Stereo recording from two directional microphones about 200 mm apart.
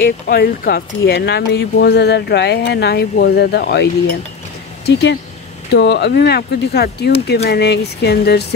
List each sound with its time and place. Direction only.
0.0 s speech: 50° left (ahead or behind)